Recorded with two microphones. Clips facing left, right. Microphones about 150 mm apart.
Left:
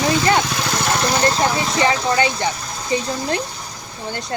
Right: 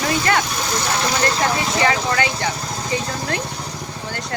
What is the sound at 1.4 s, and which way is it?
Speech, 25° left (ahead or behind).